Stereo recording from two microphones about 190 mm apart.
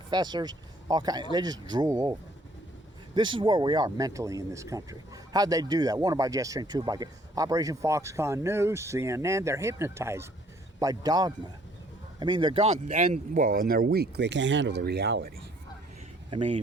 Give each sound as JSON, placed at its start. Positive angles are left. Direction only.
{"t": 0.1, "sound": "speech", "side_deg": -20}
{"t": 3.2, "sound": "speech", "side_deg": -25}
{"t": 13.0, "sound": "speech", "side_deg": -40}
{"t": 16.3, "sound": "speech", "side_deg": -35}